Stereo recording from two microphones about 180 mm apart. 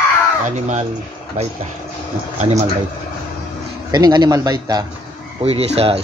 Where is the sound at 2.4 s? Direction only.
40° right (ahead or behind).